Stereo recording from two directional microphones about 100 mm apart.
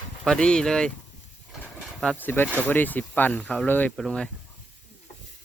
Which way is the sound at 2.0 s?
15° left (ahead or behind).